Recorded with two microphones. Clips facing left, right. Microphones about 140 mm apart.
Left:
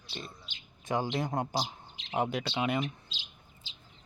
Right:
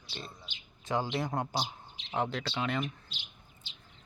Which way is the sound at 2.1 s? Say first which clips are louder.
Left 2 dB; 15° left (ahead or behind).